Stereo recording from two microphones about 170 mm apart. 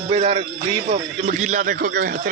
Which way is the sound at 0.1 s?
40° right (ahead or behind).